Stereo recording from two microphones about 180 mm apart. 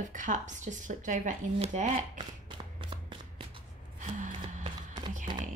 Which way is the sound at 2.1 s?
25° right (ahead or behind).